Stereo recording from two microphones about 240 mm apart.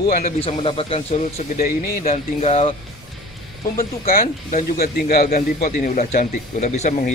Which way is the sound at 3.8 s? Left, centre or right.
Left.